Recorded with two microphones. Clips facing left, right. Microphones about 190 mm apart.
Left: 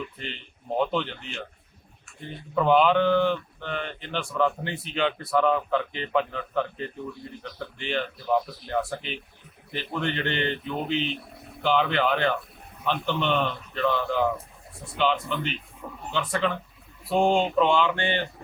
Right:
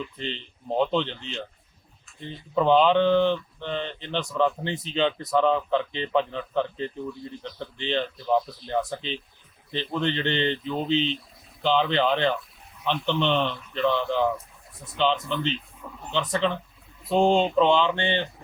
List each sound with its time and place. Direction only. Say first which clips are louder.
0.2 s speech: right 5 dB; 20° right (ahead or behind)
11.1 s a sound: right 1 dB; 65° left (ahead or behind)
11.6 s speech: right 1 dB; 20° right (ahead or behind)